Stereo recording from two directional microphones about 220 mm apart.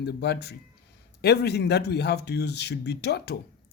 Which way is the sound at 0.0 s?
50° left (ahead or behind).